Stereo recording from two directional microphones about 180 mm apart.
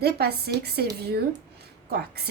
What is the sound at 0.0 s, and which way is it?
Speech, 60° right (ahead or behind).